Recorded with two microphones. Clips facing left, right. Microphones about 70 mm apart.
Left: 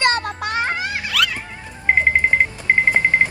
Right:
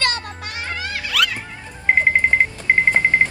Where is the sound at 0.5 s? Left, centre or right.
Left.